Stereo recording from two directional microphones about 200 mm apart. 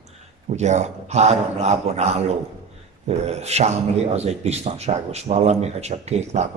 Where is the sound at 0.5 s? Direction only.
35° right (ahead or behind).